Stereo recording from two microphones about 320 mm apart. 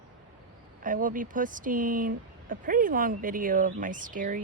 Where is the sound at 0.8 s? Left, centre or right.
Right.